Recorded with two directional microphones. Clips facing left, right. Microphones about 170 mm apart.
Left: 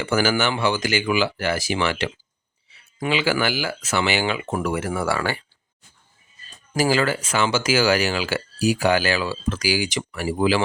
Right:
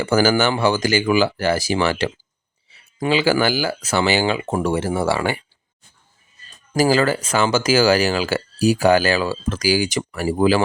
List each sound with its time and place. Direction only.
0.0 s speech: 40° right (ahead or behind); by 5.4 s 20° right (ahead or behind)
6.7 s speech: 40° right (ahead or behind)